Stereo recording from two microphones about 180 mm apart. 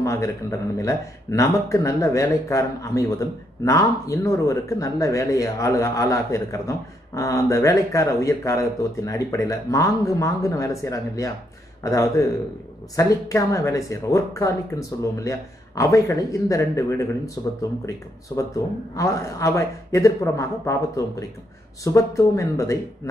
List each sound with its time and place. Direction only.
0.0 s speech: 15° left (ahead or behind)